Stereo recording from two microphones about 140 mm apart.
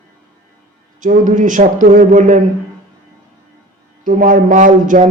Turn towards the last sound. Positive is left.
turn(degrees=-70)  # may be behind; listen again after turning